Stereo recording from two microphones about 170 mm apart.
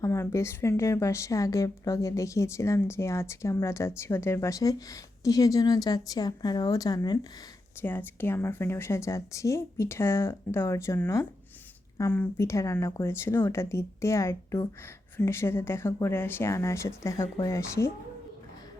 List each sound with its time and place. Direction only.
0.0 s a woman's voice: 15° left (ahead or behind)
7.8 s a woman's voice: 10° left (ahead or behind)